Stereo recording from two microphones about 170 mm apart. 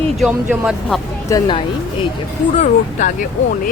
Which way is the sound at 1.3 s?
25° left (ahead or behind).